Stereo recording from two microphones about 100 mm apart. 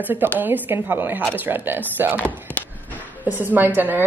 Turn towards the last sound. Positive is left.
turn(degrees=-20)  # may be behind; listen again after turning